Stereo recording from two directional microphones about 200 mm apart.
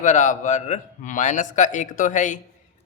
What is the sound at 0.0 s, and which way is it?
A woman's voice, 40° left (ahead or behind).